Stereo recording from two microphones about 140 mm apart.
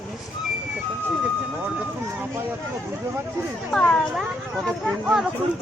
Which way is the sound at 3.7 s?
5° left (ahead or behind).